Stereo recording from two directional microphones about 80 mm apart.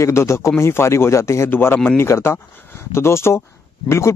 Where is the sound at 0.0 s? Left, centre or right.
Left.